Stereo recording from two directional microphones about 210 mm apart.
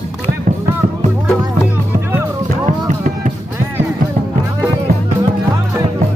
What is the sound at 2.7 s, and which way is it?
Music, 35° right (ahead or behind).